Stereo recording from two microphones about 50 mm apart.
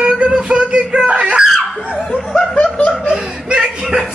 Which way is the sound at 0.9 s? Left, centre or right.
Right.